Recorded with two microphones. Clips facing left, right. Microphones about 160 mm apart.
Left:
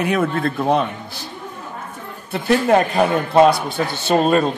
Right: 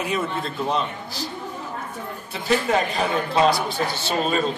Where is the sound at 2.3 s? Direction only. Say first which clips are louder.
Left 6 dB; 55° left (ahead or behind).